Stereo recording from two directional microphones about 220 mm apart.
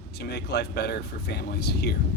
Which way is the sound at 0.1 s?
50° left (ahead or behind).